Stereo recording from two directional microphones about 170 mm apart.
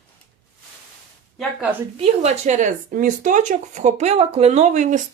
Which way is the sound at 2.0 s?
35° right (ahead or behind).